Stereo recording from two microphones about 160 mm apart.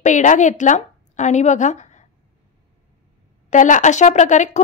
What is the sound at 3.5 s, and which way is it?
Speech, 50° left (ahead or behind).